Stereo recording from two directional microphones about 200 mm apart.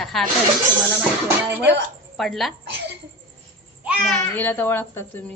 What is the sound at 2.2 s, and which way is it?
Speech, centre (ahead or behind).